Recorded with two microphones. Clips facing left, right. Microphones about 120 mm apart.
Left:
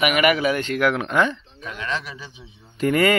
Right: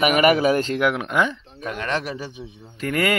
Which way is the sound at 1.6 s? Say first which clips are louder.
Right 4 dB; 55° right (ahead or behind).